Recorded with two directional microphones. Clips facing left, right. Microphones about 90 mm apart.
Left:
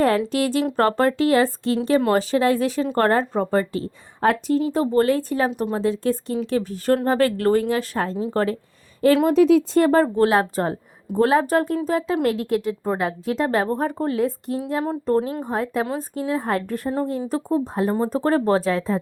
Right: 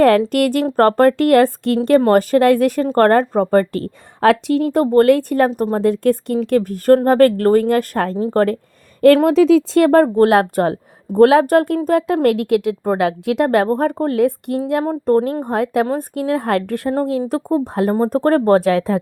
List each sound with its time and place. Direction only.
0.3 s speech: 60° right (ahead or behind)
2.0 s speech: 45° right (ahead or behind)
5.5 s speech: 45° right (ahead or behind)
9.0 s speech: 60° right (ahead or behind)
14.8 s a woman's voice: 50° right (ahead or behind); by 18.9 s 70° right (ahead or behind)